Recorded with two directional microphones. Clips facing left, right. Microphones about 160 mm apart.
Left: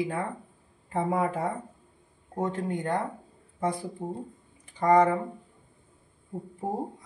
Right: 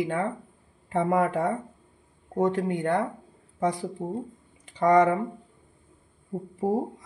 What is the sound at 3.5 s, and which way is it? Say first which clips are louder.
Speech: right 3 dB; 90° right.